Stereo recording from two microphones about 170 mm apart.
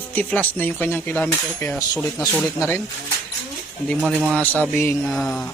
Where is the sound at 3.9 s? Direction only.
Centre (ahead or behind).